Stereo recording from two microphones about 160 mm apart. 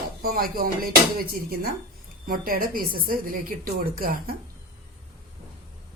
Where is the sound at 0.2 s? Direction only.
65° right (ahead or behind).